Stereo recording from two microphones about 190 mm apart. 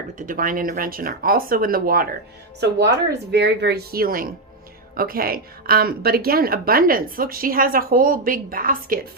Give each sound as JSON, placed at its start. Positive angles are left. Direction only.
{"t": 0.2, "sound": "a woman's voice", "side_deg": -45}
{"t": 2.6, "sound": "a woman's voice", "side_deg": -60}